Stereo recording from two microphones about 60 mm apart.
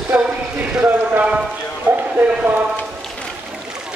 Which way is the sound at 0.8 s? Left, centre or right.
Right.